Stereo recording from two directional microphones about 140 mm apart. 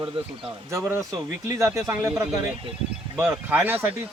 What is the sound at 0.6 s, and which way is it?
A man's voice, 20° right (ahead or behind).